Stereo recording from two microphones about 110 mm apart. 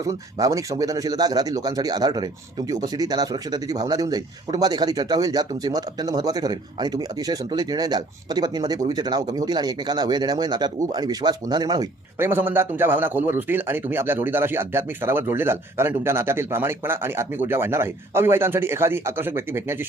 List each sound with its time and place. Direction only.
0.0 s speech: 30° right (ahead or behind)
12.2 s a man's voice: 20° right (ahead or behind)